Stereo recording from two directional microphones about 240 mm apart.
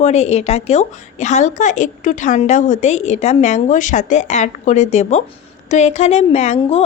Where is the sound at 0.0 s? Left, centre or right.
Left.